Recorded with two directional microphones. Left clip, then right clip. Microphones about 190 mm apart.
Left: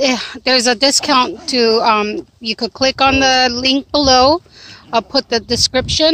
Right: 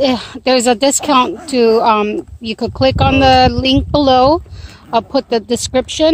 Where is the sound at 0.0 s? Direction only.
Centre (ahead or behind).